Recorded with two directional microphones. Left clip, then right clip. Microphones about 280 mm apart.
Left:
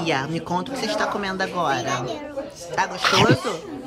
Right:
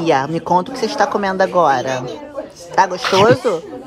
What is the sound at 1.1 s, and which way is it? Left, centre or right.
Speech, centre.